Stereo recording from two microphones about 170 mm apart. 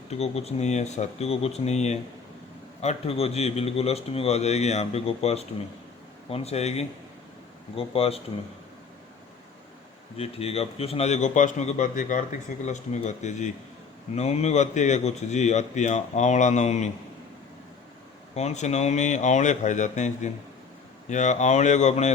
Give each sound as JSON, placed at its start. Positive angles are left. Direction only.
{"t": 0.1, "sound": "a man's voice", "side_deg": 40}
{"t": 10.2, "sound": "a man's voice", "side_deg": 35}
{"t": 18.3, "sound": "speech", "side_deg": 40}